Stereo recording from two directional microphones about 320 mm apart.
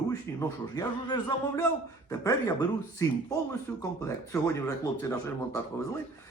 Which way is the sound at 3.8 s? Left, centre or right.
Centre.